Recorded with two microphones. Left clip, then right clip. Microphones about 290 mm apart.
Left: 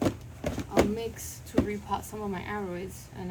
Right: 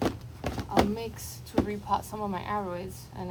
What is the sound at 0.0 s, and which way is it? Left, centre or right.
A woman's voice, centre.